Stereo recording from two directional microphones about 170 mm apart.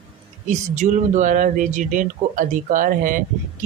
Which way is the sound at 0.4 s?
45° right (ahead or behind).